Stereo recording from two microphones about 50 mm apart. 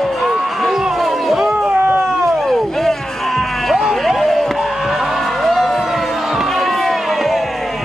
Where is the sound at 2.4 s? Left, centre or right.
Centre.